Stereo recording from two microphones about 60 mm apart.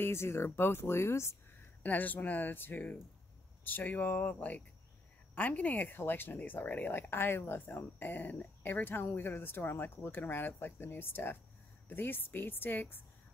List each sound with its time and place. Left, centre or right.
0.0 s speech: left
1.8 s speech: left